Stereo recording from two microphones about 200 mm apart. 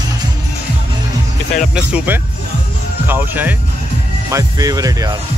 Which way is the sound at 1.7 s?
5° right (ahead or behind).